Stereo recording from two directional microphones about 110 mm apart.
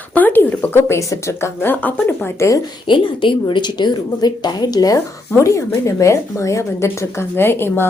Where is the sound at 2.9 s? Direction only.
45° left (ahead or behind).